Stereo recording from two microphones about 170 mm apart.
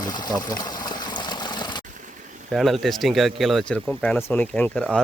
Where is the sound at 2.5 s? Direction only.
Centre (ahead or behind).